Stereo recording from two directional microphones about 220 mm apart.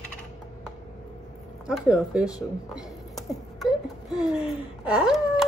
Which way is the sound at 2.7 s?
Centre (ahead or behind).